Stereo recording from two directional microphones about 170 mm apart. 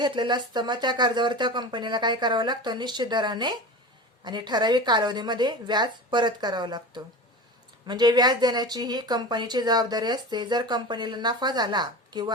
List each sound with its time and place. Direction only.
0.0 s speech: 25° right (ahead or behind)